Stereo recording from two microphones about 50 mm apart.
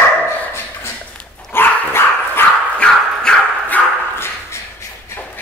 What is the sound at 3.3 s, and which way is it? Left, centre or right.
Dog, centre.